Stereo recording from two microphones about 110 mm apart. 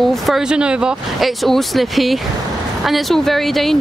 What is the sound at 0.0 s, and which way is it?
Speech, centre (ahead or behind).